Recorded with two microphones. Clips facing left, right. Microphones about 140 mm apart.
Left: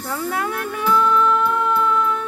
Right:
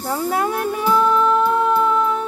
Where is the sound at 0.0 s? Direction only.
30° right (ahead or behind).